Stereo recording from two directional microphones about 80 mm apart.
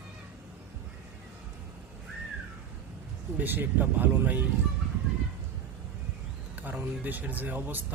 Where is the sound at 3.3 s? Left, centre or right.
Right.